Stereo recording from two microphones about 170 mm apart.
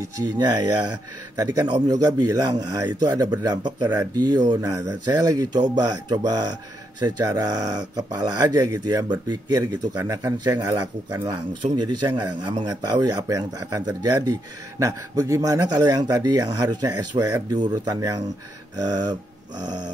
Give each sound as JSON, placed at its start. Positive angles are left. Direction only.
{"t": 0.2, "sound": "speech", "side_deg": -25}